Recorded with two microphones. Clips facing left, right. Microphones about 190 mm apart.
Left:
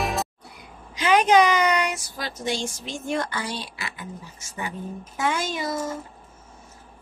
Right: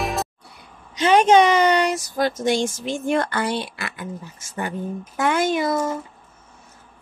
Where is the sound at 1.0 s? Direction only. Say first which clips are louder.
Right 3 dB; 30° right (ahead or behind); by 5.9 s 55° right (ahead or behind).